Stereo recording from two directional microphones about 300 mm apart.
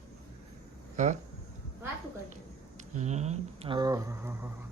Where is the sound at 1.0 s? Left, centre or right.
Right.